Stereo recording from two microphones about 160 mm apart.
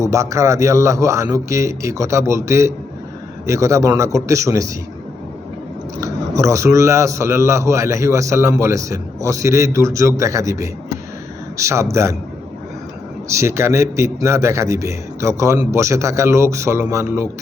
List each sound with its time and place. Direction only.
0.0 s a man's voice: 20° right (ahead or behind)
6.0 s a man's voice: 20° right (ahead or behind)
13.2 s a man's voice: 20° right (ahead or behind)